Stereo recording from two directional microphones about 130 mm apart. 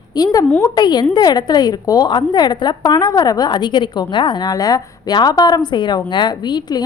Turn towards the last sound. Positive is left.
turn(degrees=30)  # may be behind; listen again after turning